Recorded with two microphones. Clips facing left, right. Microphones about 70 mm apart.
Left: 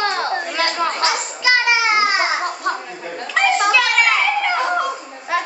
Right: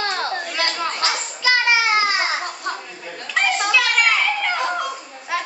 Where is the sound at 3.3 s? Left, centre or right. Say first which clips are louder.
Left 4 dB; centre.